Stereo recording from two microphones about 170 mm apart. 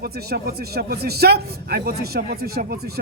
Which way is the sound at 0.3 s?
65° right (ahead or behind).